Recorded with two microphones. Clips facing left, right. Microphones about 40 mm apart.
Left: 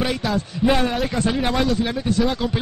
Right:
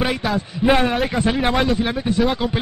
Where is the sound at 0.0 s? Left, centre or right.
Centre.